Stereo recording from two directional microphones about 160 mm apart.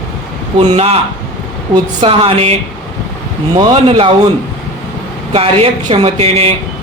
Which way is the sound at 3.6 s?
30° right (ahead or behind).